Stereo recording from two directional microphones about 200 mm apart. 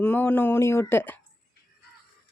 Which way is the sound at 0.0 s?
10° left (ahead or behind).